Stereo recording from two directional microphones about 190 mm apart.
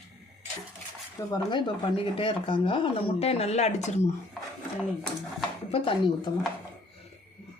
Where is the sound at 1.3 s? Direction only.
25° left (ahead or behind).